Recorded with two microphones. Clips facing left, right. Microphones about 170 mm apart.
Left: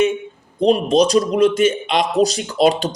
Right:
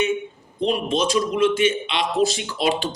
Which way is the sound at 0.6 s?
40° left (ahead or behind).